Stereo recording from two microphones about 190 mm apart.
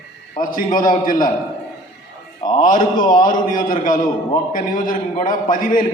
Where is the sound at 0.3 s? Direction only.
45° left (ahead or behind).